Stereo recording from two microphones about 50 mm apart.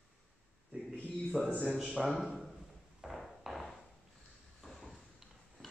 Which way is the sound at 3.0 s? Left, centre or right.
Centre.